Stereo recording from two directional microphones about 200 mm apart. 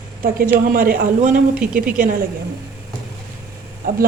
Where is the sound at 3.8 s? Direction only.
45° right (ahead or behind).